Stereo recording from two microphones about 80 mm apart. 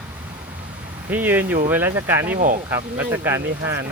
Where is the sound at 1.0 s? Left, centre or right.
Right.